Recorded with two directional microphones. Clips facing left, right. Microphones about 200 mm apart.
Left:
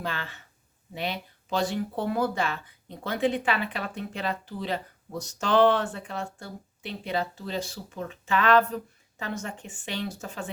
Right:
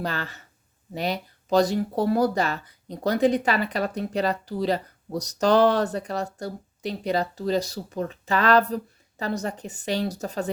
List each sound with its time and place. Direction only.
0.0 s speech: 40° right (ahead or behind)